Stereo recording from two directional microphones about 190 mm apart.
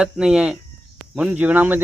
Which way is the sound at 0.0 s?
5° right (ahead or behind).